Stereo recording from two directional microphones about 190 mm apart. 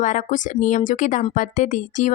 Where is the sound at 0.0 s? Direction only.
40° left (ahead or behind).